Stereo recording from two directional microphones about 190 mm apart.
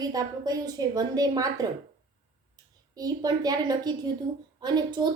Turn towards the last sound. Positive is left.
turn(degrees=-20)  # may be behind; listen again after turning